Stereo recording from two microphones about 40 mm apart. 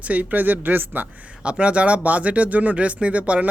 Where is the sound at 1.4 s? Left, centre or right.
Right.